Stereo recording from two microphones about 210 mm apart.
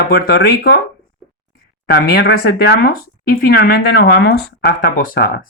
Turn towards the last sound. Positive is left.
turn(degrees=45)  # may be behind; listen again after turning